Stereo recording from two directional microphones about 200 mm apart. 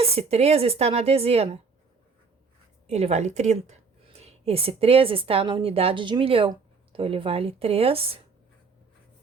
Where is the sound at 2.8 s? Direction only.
30° right (ahead or behind).